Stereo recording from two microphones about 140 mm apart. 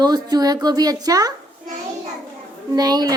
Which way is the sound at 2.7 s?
30° right (ahead or behind).